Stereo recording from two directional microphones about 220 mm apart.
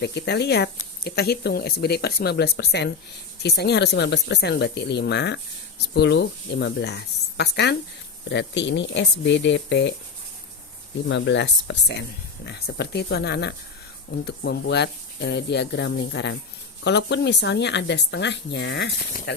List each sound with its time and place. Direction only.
0.0 s speech: 50° left (ahead or behind)
11.1 s speech: 55° left (ahead or behind)